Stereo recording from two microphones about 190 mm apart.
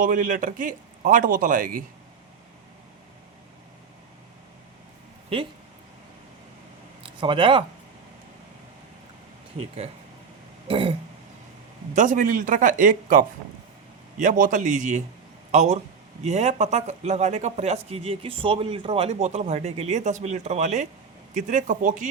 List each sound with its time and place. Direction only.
0.0 s a man's voice: 45° right (ahead or behind)
7.0 s speech: 25° right (ahead or behind)
10.7 s throat clearing: 30° right (ahead or behind)
11.9 s a man's voice: 45° right (ahead or behind)